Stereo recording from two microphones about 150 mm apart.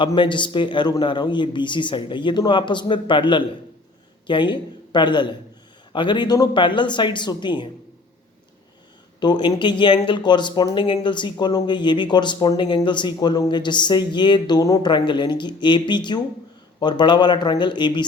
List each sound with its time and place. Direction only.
0.0 s a man's voice: 30° left (ahead or behind)
9.2 s speech: 30° left (ahead or behind)